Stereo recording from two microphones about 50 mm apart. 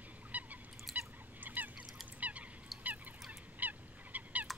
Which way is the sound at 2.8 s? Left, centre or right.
Right.